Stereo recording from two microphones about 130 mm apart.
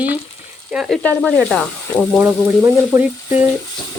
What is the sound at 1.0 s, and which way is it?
Sizzle, 10° left (ahead or behind).